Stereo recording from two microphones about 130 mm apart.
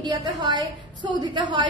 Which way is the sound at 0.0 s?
35° right (ahead or behind).